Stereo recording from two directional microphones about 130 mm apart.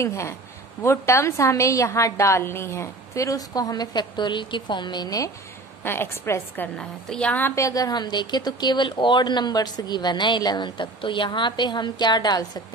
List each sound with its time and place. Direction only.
0.0 s a woman's voice: 20° left (ahead or behind)
5.9 s a woman's voice: 20° left (ahead or behind)
6.8 s a woman's voice: 5° left (ahead or behind); by 12.6 s 30° left (ahead or behind)